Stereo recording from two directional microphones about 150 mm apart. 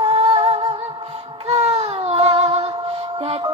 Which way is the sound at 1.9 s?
40° right (ahead or behind).